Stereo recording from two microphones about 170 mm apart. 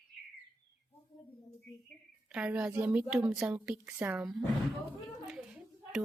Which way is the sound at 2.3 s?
5° right (ahead or behind).